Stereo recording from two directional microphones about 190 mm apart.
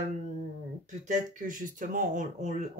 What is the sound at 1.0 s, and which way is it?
Speech, 40° right (ahead or behind).